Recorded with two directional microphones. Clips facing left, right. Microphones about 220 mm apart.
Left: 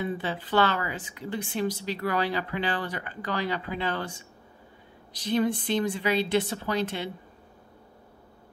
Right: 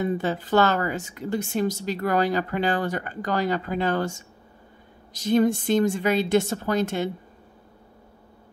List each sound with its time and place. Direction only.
0.0 s a woman's voice: 45° right (ahead or behind)